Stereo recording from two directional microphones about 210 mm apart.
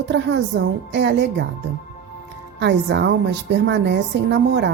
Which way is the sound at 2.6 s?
55° right (ahead or behind).